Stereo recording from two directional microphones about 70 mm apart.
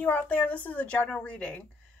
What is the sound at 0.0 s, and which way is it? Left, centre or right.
Speech, left.